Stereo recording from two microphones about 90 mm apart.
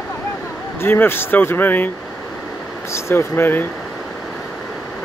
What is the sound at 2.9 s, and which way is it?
Speech, 30° left (ahead or behind).